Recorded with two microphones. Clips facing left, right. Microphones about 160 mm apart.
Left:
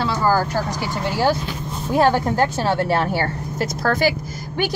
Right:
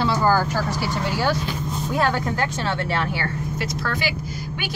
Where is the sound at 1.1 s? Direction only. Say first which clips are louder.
Left 3 dB; 40° left (ahead or behind).